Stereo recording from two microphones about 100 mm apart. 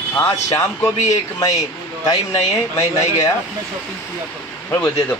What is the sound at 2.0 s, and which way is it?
Speech, 35° left (ahead or behind).